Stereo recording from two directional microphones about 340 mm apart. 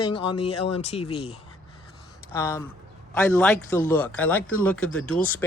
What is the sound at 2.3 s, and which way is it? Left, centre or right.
Speech, centre.